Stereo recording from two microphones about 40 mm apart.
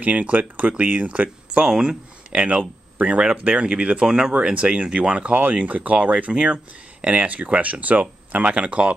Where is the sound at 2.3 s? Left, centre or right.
Right.